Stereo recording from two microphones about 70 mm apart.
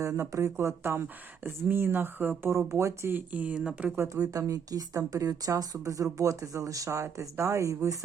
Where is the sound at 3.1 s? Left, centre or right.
Right.